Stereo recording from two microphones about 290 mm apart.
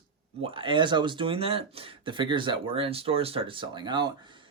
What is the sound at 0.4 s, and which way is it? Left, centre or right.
Speech, centre.